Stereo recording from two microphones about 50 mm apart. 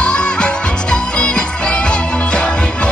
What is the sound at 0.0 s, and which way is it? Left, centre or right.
Music, centre.